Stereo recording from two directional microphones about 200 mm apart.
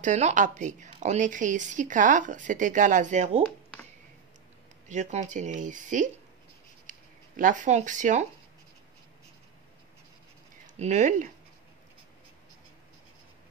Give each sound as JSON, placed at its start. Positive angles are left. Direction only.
{"t": 0.0, "sound": "a woman's voice", "side_deg": -40}
{"t": 4.8, "sound": "a woman's voice", "side_deg": -35}
{"t": 10.8, "sound": "a woman's voice", "side_deg": -35}